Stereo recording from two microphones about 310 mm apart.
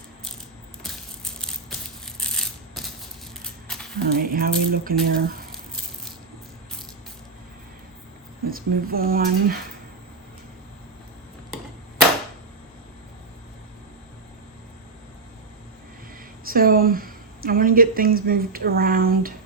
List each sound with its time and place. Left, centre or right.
0.8 s a sound: centre
2.0 s coin: centre
3.4 s a sound: centre
4.0 s speech: right
8.4 s speech: right
16.5 s speech: right